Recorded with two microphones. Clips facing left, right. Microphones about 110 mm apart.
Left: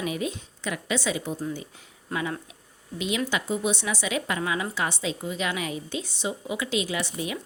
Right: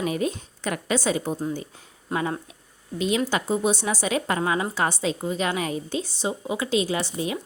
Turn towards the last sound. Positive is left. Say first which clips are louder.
# right 3 dB
turn(degrees=-30)  # may be behind; listen again after turning